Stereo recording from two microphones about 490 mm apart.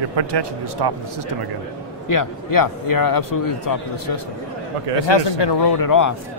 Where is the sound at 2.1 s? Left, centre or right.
Left.